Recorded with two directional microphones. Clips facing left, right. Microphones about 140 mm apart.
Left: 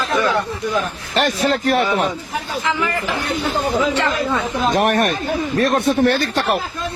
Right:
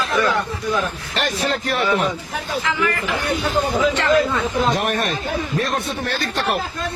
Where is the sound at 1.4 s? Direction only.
40° left (ahead or behind).